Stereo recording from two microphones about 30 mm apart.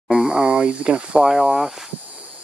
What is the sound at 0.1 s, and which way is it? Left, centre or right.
Speech, right.